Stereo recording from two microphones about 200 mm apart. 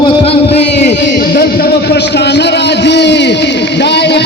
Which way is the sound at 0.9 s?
50° left (ahead or behind).